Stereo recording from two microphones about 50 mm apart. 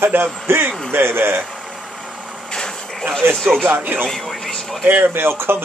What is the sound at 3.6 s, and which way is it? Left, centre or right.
Speech, right.